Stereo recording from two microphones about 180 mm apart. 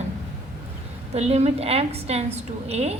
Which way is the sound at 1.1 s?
35° right (ahead or behind).